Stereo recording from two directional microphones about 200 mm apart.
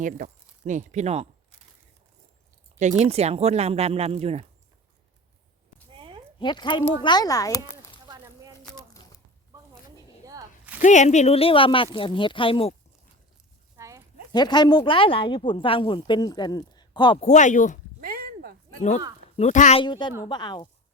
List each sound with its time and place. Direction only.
0.0 s speech: 40° right (ahead or behind)
2.7 s speech: 35° right (ahead or behind)
6.0 s a sound: 25° right (ahead or behind)
6.4 s speech: 20° left (ahead or behind)
8.0 s a sound: 20° right (ahead or behind)
10.8 s speech: 35° left (ahead or behind)
13.7 s a sound: 15° right (ahead or behind)
14.3 s speech: 20° left (ahead or behind)
17.2 s speech: 35° left (ahead or behind)
18.0 s a sound: 45° right (ahead or behind)
19.4 s speech: 35° left (ahead or behind)
19.8 s speech: 25° left (ahead or behind)